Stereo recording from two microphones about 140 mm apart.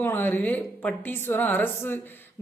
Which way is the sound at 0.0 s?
15° left (ahead or behind).